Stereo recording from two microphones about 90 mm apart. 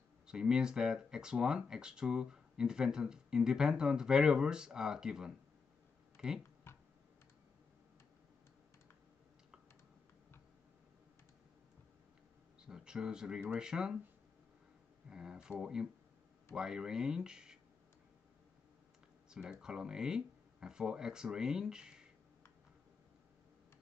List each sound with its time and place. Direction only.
0.3 s speech: 10° right (ahead or behind)
6.1 s typing: 5° right (ahead or behind)
6.7 s clicking: 30° left (ahead or behind)
12.6 s speech: 5° right (ahead or behind)
15.0 s speech: 10° right (ahead or behind)
19.3 s speech: 10° right (ahead or behind)